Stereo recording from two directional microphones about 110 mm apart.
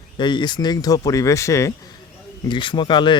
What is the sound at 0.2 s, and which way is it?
Speech, 45° left (ahead or behind).